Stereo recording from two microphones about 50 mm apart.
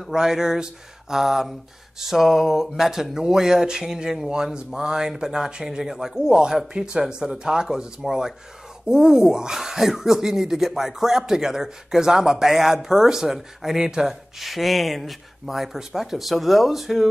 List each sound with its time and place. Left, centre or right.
0.1 s speech: centre
14.4 s speech: centre